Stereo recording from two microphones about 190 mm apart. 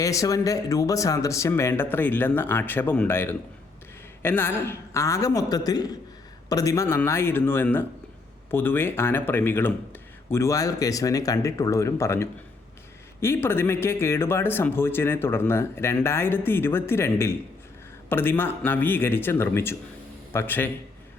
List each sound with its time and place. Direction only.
0.0 s speech: 15° left (ahead or behind)